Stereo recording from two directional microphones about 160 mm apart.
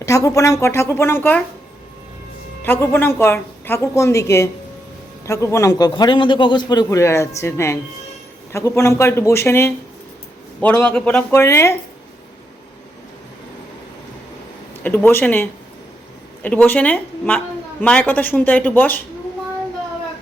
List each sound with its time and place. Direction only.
0.0 s speech: 20° left (ahead or behind)
2.6 s a man's voice: 15° left (ahead or behind)
14.8 s speech: 10° left (ahead or behind)